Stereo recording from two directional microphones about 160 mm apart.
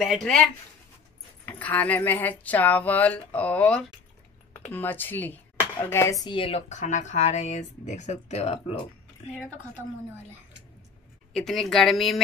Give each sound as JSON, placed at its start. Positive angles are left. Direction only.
{"t": 0.0, "sound": "speech", "side_deg": 0}
{"t": 1.4, "sound": "speech", "side_deg": 10}
{"t": 6.2, "sound": "speech", "side_deg": 35}
{"t": 6.7, "sound": "speech", "side_deg": 50}
{"t": 11.3, "sound": "speech", "side_deg": 0}